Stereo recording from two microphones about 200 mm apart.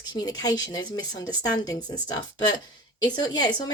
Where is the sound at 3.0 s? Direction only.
20° left (ahead or behind).